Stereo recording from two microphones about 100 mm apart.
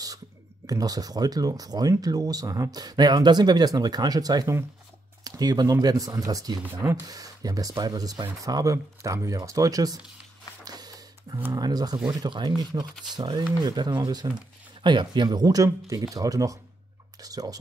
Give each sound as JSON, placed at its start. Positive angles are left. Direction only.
{"t": 0.7, "sound": "speech", "side_deg": -40}
{"t": 10.6, "sound": "printer", "side_deg": -40}
{"t": 11.5, "sound": "speech", "side_deg": -40}